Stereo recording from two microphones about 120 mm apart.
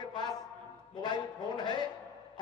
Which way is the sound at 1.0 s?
40° left (ahead or behind).